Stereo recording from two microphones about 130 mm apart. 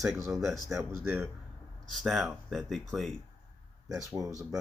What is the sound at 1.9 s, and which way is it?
Speech, centre (ahead or behind).